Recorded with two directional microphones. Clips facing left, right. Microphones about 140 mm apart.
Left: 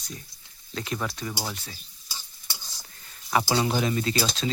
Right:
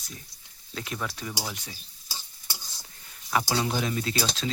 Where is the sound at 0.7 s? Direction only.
Centre (ahead or behind).